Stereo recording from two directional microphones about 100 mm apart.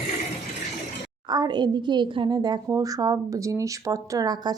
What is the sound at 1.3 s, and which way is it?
A woman's voice, 45° right (ahead or behind).